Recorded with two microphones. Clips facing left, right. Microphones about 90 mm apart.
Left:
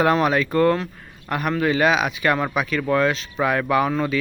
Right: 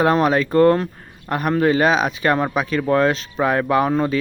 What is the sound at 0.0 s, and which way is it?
Speech, 35° right (ahead or behind).